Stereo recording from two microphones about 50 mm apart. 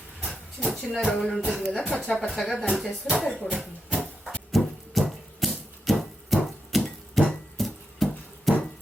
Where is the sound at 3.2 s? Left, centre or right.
Left.